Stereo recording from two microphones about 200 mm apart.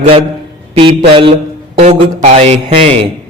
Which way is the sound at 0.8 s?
25° right (ahead or behind).